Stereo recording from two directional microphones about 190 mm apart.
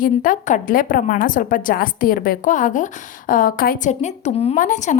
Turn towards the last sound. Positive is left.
turn(degrees=40)  # may be behind; listen again after turning